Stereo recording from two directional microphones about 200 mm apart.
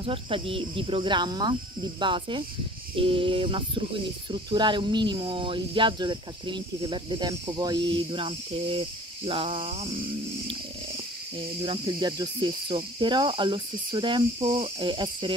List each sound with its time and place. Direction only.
0.0 s cricket: 25° right (ahead or behind)
11.6 s cricket: 20° right (ahead or behind)